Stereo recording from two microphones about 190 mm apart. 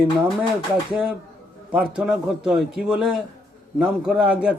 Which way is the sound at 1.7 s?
5° right (ahead or behind).